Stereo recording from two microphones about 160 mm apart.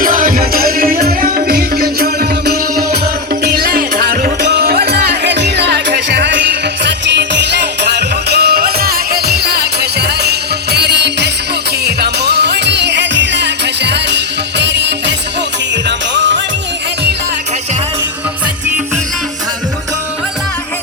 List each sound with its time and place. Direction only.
0.0 s music: 60° right (ahead or behind); by 16.4 s 90° right